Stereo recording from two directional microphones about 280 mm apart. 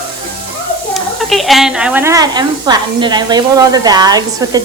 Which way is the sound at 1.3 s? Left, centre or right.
Centre.